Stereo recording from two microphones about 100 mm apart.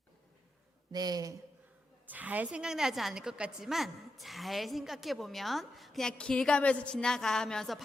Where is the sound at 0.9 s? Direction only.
40° right (ahead or behind).